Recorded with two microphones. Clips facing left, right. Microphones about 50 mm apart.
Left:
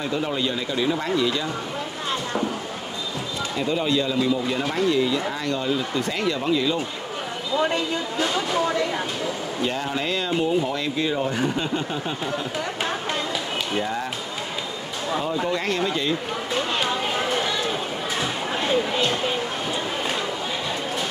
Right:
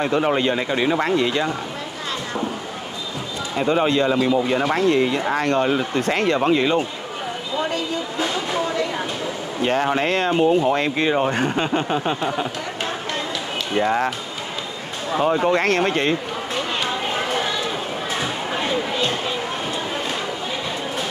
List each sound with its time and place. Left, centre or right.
0.0 s speech: right
3.5 s speech: right
8.2 s speech: centre
9.6 s speech: right
13.8 s speech: right
15.2 s speech: right
18.2 s a sound: centre